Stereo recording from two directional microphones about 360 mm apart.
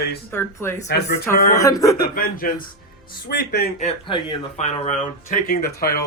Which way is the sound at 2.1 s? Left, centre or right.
Left.